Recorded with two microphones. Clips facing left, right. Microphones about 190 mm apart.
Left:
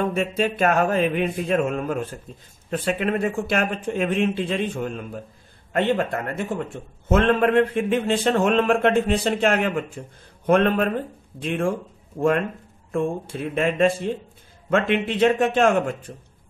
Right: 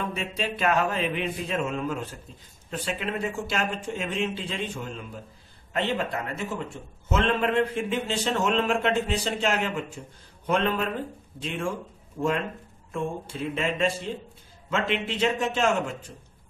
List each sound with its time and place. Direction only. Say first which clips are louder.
0.0 s mantra: left 8 dB; 45° left (ahead or behind)
2.7 s a man's voice: left 7 dB; 55° left (ahead or behind)
5.7 s mantra: left 6 dB; 50° left (ahead or behind)
7.1 s a man's voice: left 6 dB; 55° left (ahead or behind)
12.9 s mantra: left 6 dB; 55° left (ahead or behind)